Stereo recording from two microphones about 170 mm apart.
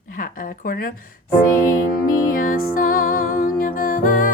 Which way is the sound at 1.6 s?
55° left (ahead or behind).